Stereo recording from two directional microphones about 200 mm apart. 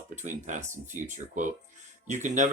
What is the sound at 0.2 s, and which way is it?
Speech, 35° right (ahead or behind).